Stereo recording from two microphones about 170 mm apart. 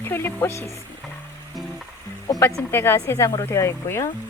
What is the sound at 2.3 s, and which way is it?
A woman's voice, 20° left (ahead or behind).